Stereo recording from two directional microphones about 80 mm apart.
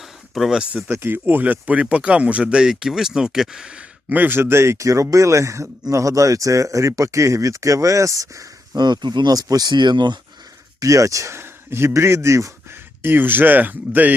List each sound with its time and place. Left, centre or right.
0.0 s speech: centre; by 10.2 s right
10.8 s a man's voice: right
13.0 s speech: right